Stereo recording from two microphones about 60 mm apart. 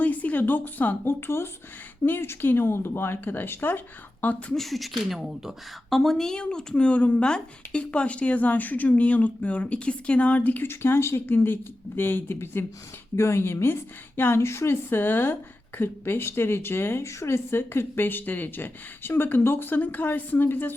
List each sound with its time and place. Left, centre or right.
0.0 s speech: left
4.5 s a woman's voice: centre; by 10.7 s left
10.7 s speech: left